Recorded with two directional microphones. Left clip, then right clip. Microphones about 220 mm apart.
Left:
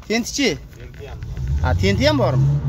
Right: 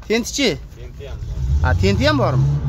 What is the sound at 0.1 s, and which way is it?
Speech, 20° right (ahead or behind).